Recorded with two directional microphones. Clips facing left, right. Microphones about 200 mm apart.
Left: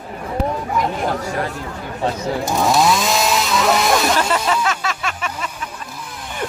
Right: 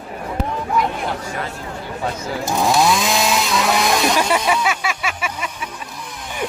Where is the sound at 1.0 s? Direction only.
40° left (ahead or behind).